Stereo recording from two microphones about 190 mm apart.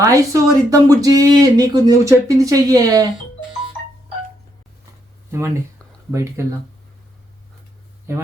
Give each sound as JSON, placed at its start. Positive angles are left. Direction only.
{"t": 0.0, "sound": "speech", "side_deg": -15}
{"t": 6.1, "sound": "speech", "side_deg": -15}
{"t": 8.1, "sound": "speech", "side_deg": -15}